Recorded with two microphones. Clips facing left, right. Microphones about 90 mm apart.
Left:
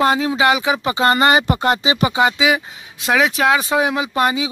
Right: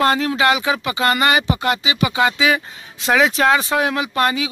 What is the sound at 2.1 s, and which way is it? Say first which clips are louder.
Speech: even; 20° left (ahead or behind).